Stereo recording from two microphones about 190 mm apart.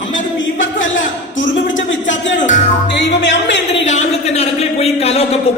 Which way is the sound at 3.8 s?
35° left (ahead or behind).